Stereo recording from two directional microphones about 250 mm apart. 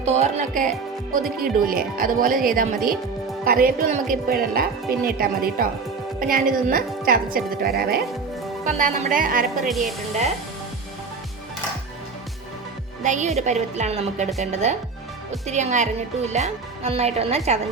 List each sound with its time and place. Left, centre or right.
0.0 s a woman's voice: right
9.6 s a woman's voice: centre
13.0 s a woman's voice: right